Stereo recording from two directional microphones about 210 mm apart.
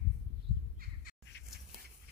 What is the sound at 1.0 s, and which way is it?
Crow, 45° left (ahead or behind).